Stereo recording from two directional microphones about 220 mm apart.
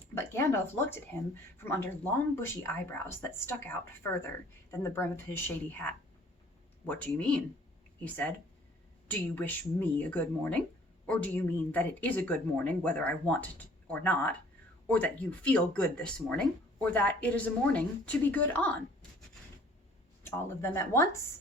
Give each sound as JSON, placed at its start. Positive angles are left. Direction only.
{"t": 0.1, "sound": "speech", "side_deg": 10}
{"t": 20.2, "sound": "speech", "side_deg": 10}